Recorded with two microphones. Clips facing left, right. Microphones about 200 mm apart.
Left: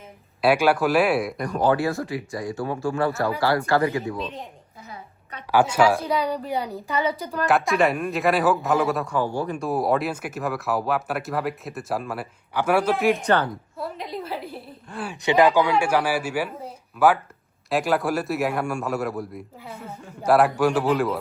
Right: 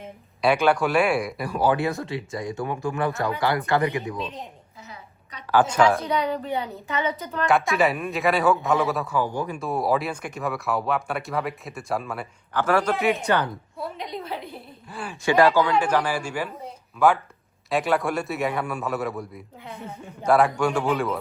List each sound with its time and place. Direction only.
0.4 s speech: 5° left (ahead or behind)
1.7 s speech: 20° right (ahead or behind)
4.2 s speech: centre (ahead or behind)
5.5 s speech: 10° left (ahead or behind)
6.5 s a woman's voice: 35° left (ahead or behind)
7.3 s speech: centre (ahead or behind)
13.2 s a woman's voice: 15° right (ahead or behind)
14.0 s speech: centre (ahead or behind)
15.1 s speech: 20° left (ahead or behind); by 21.2 s centre (ahead or behind)